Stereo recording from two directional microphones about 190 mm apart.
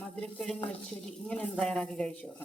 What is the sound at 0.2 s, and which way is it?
A woman's voice, 5° left (ahead or behind).